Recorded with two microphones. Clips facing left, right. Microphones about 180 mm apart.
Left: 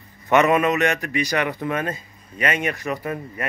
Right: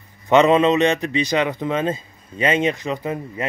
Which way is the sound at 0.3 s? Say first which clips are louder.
Right 3 dB; 20° right (ahead or behind).